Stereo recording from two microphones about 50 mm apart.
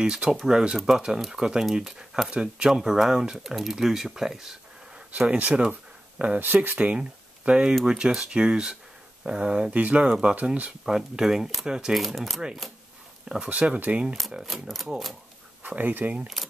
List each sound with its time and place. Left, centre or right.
0.0 s speech: centre
4.9 s speech: right
6.4 s speech: right
10.9 s speech: centre
11.9 s speech: centre
13.3 s speech: right
14.3 s speech: centre
15.6 s speech: right